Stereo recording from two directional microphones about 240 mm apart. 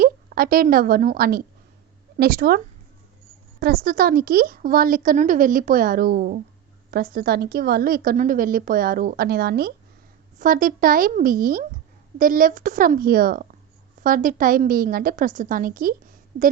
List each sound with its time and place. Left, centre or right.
0.0 s a woman's voice: right
3.6 s a woman's voice: right
16.3 s a woman's voice: right